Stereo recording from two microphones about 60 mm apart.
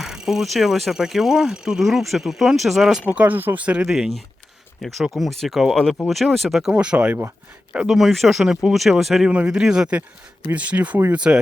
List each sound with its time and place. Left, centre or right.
0.0 s speech: centre
3.1 s speech: right
3.8 s speech: centre
6.6 s speech: centre
7.7 s speech: centre